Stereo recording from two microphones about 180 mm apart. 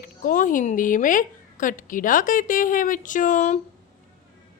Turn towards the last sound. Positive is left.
turn(degrees=45)  # may be behind; listen again after turning